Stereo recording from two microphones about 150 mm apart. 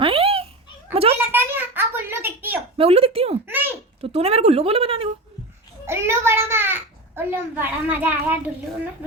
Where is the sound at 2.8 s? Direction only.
40° right (ahead or behind).